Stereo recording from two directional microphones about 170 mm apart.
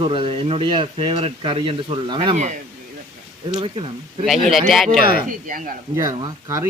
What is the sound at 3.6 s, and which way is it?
Speech, 30° right (ahead or behind).